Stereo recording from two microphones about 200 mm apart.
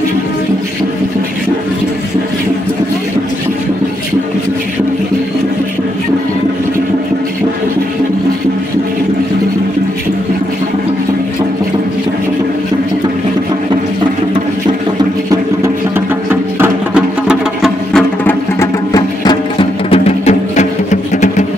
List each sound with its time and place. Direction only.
16.3 s music: 10° right (ahead or behind)
18.2 s music: 15° left (ahead or behind); by 21.5 s 35° left (ahead or behind)